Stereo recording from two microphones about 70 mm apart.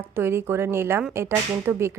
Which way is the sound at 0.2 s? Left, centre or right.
Right.